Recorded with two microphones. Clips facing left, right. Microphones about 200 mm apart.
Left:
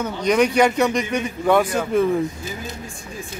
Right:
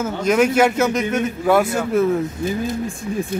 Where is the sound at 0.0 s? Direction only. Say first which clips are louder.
Right 1 dB; 5° right (ahead or behind).